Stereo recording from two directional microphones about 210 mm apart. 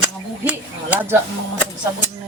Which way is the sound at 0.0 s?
5° right (ahead or behind).